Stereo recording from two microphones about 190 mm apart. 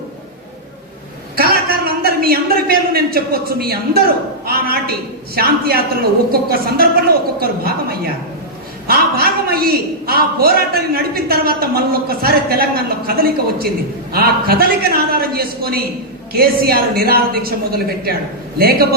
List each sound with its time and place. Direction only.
1.4 s a man's voice: 50° right (ahead or behind)